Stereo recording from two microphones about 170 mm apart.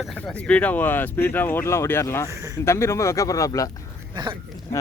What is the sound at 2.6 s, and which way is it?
Speech, 15° left (ahead or behind).